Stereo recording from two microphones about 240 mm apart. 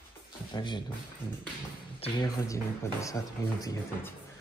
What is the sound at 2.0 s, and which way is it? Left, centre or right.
A man's voice, left.